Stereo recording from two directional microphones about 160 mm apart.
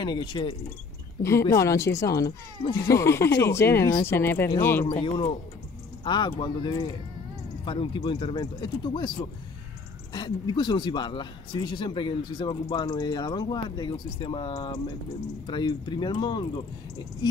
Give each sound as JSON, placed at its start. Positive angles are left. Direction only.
{"t": 0.0, "sound": "speech", "side_deg": 30}
{"t": 1.2, "sound": "speech", "side_deg": 20}
{"t": 4.8, "sound": "speech", "side_deg": 35}